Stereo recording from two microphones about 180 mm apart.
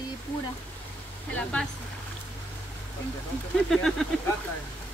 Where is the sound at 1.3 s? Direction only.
5° left (ahead or behind).